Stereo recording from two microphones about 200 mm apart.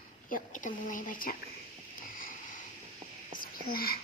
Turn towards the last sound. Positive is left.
turn(degrees=45)  # may be behind; listen again after turning